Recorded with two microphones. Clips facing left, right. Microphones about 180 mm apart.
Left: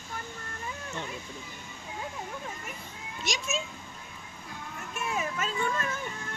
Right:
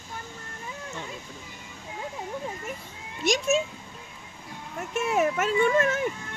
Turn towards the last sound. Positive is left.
turn(degrees=-75)  # may be behind; listen again after turning